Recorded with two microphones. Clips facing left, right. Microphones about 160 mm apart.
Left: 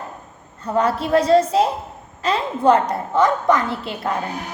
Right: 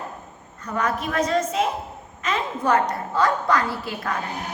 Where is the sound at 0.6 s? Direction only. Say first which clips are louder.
Left 6 dB; 30° left (ahead or behind).